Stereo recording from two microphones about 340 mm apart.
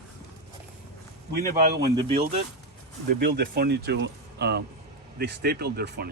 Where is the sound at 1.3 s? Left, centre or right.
Right.